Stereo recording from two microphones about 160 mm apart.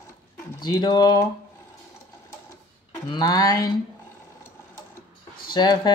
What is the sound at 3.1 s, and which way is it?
Speech, 25° left (ahead or behind).